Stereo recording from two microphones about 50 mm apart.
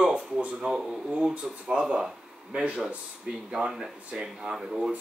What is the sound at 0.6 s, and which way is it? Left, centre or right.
Speech, centre.